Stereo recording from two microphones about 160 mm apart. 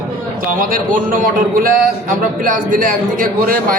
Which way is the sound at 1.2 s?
60° right (ahead or behind).